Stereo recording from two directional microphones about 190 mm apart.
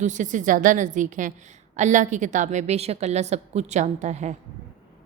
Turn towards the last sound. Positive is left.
turn(degrees=-40)  # may be behind; listen again after turning